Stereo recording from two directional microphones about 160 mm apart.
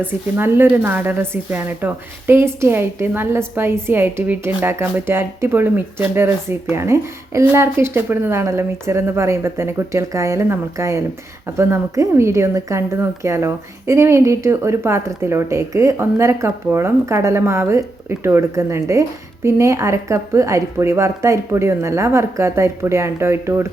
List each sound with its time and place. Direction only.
0.0 s a woman's voice: 10° right (ahead or behind)